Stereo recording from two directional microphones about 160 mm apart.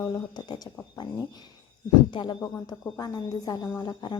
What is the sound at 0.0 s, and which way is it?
Speech, 25° left (ahead or behind).